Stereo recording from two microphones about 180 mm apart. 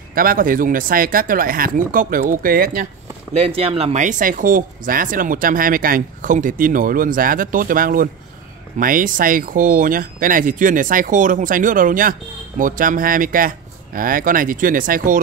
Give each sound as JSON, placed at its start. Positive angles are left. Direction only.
{"t": 0.1, "sound": "speech", "side_deg": -50}
{"t": 3.3, "sound": "speech", "side_deg": -35}